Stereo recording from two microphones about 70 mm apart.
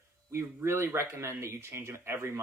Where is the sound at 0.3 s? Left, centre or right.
Right.